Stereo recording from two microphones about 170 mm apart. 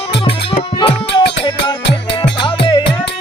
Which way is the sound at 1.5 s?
25° left (ahead or behind).